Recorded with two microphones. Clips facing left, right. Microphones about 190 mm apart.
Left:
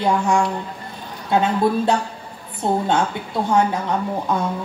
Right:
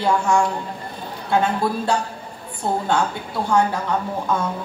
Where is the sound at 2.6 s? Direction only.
20° left (ahead or behind).